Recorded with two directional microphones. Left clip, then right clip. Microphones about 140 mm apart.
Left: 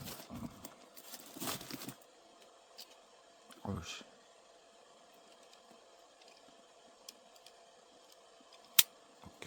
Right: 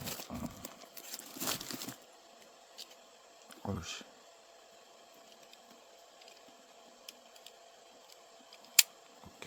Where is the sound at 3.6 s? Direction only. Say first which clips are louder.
Right 3 dB; 15° right (ahead or behind).